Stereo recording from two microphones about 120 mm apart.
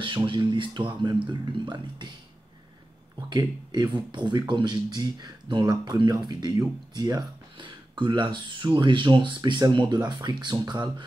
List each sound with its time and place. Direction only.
0.0 s speech: 40° right (ahead or behind)
3.3 s speech: 35° right (ahead or behind)